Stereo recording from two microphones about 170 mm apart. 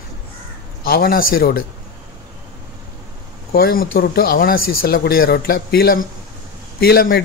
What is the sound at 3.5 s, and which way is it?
Speech, 65° left (ahead or behind).